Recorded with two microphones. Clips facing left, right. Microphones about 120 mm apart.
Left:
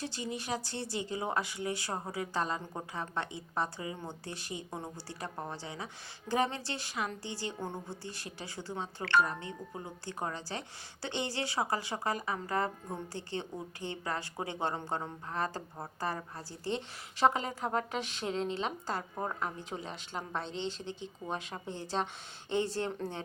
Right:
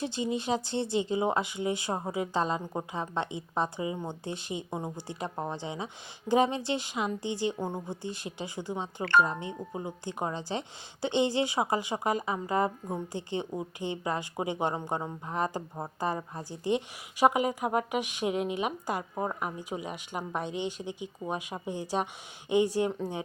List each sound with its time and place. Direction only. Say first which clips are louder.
0.0 s speech: right 7 dB; 20° right (ahead or behind)